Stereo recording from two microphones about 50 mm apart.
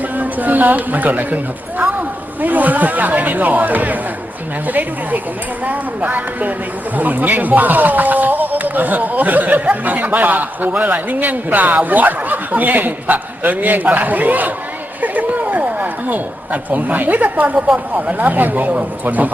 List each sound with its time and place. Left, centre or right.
0.2 s speech: right
15.0 s a sound: right
17.9 s speech: right